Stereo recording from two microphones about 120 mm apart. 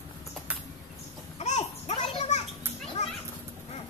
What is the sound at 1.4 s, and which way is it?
Children playing, 70° left (ahead or behind).